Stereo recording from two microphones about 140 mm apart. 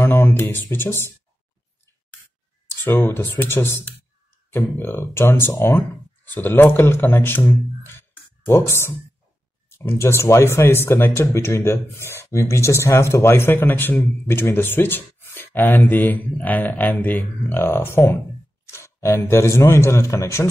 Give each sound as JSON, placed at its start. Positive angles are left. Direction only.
{"t": 0.0, "sound": "speech", "side_deg": 15}
{"t": 2.8, "sound": "speech", "side_deg": 15}